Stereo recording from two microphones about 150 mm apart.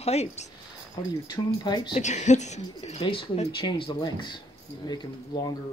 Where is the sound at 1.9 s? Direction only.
50° left (ahead or behind).